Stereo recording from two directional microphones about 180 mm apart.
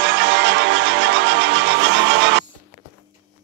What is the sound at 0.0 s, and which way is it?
Music, 80° right.